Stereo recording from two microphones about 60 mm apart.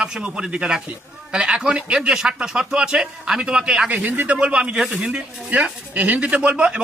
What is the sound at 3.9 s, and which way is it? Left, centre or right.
A man's voice, right.